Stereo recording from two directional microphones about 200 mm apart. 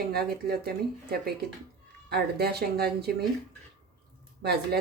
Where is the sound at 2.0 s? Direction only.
50° right (ahead or behind).